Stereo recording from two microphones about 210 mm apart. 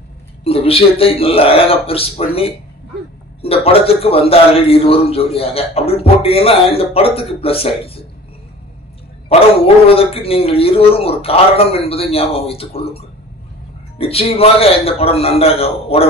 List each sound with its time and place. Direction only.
0.4 s a man's voice: 25° left (ahead or behind)
9.8 s a man's voice: 25° left (ahead or behind)